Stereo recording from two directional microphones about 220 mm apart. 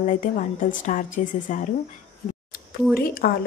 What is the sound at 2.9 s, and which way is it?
Speech, 45° left (ahead or behind).